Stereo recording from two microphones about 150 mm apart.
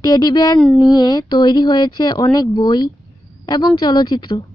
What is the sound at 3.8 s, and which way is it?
Speech, 30° left (ahead or behind).